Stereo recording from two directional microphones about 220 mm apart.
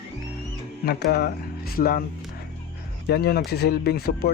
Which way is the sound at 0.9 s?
45° left (ahead or behind).